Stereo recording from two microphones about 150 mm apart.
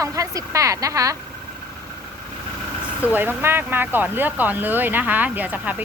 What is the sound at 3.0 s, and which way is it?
Speech, 10° right (ahead or behind).